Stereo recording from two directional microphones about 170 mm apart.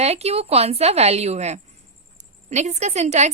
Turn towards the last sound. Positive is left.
turn(degrees=-40)  # may be behind; listen again after turning